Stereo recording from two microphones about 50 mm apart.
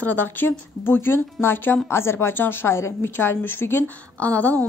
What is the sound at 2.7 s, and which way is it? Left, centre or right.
A woman's voice, left.